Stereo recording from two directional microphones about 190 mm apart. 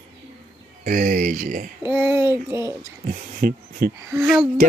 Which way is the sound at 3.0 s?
50° right (ahead or behind).